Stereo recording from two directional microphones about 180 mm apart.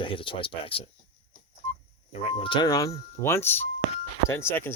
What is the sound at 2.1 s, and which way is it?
Speech, 30° left (ahead or behind).